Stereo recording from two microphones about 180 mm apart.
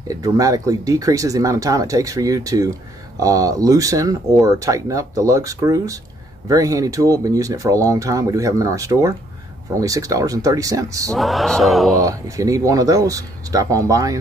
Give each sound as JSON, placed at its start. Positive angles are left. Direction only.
{"t": 0.1, "sound": "speech", "side_deg": -20}
{"t": 11.1, "sound": "a sound", "side_deg": 0}
{"t": 11.9, "sound": "speech", "side_deg": -20}